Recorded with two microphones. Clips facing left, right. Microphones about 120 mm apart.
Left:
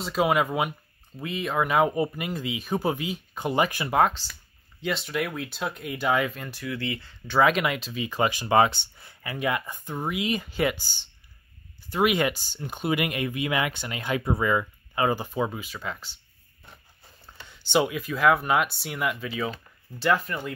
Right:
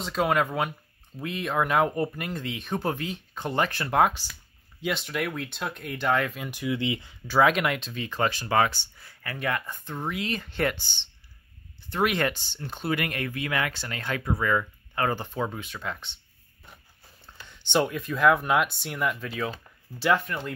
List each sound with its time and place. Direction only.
0.0 s speech: 5° left (ahead or behind)
4.0 s speech: 10° right (ahead or behind)
4.8 s speech: centre (ahead or behind)
6.4 s speech: 15° right (ahead or behind)
7.2 s speech: centre (ahead or behind)
11.9 s speech: 10° left (ahead or behind)
17.3 s speech: 5° left (ahead or behind)